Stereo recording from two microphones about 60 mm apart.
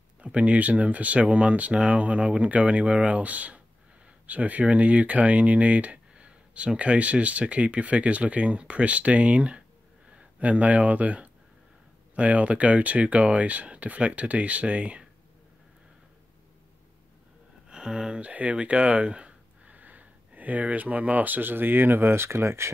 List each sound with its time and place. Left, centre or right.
0.2 s speech: right
17.6 s speech: centre; by 22.7 s right